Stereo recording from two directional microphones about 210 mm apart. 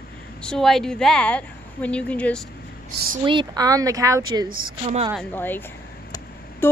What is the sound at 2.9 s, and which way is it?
Speech, 45° right (ahead or behind).